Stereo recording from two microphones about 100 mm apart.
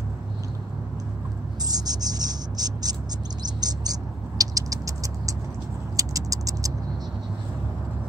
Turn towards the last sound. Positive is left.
turn(degrees=-35)  # may be behind; listen again after turning